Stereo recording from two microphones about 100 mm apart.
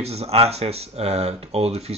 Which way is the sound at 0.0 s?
90° right.